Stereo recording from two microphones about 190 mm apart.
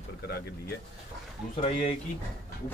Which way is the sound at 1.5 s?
30° left (ahead or behind).